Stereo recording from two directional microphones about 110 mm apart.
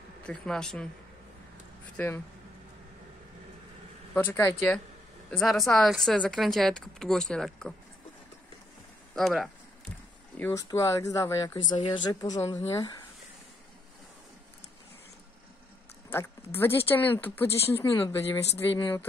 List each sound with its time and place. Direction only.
0.3 s speech: 5° left (ahead or behind)
2.0 s speech: 20° left (ahead or behind)
4.1 s speech: 20° left (ahead or behind)
5.3 s speech: centre (ahead or behind)
9.1 s speech: centre (ahead or behind)
10.5 s speech: 30° left (ahead or behind)
11.7 s a woman's voice: 45° left (ahead or behind)
12.1 s speech: 35° left (ahead or behind)
16.1 s speech: 20° left (ahead or behind)
18.7 s a woman's voice: 50° left (ahead or behind)